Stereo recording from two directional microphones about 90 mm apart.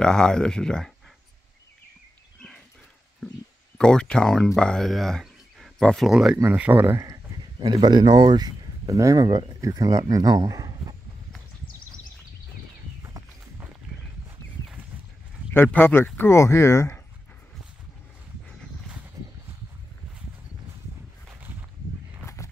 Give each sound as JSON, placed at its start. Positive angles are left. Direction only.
{"t": 0.0, "sound": "speech", "side_deg": 10}
{"t": 3.7, "sound": "speech", "side_deg": 10}
{"t": 6.0, "sound": "speech", "side_deg": -5}
{"t": 6.5, "sound": "speech", "side_deg": -20}
{"t": 7.6, "sound": "speech", "side_deg": -55}
{"t": 9.6, "sound": "speech", "side_deg": -40}
{"t": 15.5, "sound": "speech", "side_deg": 25}
{"t": 21.4, "sound": "a sound", "side_deg": -20}
{"t": 22.2, "sound": "walk", "side_deg": 35}